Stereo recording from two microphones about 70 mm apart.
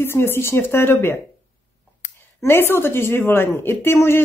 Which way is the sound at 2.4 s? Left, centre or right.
Left.